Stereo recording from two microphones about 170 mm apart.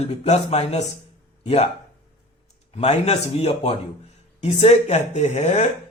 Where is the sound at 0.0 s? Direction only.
40° left (ahead or behind).